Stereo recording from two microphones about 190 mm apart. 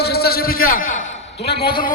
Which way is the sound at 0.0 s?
55° left (ahead or behind).